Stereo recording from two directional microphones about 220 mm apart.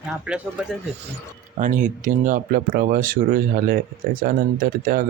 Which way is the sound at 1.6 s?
35° right (ahead or behind).